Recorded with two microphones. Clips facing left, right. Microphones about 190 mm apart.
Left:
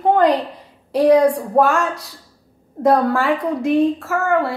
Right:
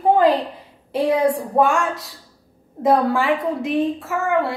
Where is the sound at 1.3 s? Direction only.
Centre (ahead or behind).